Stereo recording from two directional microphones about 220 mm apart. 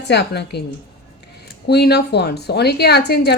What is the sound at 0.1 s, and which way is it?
Speech, 50° left (ahead or behind).